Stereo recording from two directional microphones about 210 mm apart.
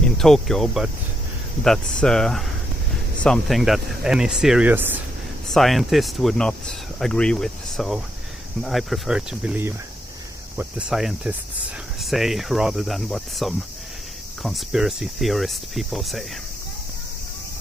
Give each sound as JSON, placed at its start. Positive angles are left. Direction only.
{"t": 0.2, "sound": "speech", "side_deg": 0}